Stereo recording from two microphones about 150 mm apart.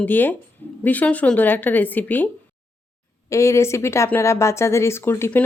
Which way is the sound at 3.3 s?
20° left (ahead or behind).